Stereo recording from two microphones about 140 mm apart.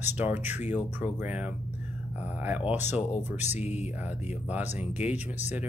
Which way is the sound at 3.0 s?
55° left (ahead or behind).